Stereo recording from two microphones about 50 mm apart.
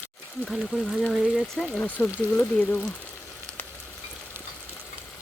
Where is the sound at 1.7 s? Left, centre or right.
Left.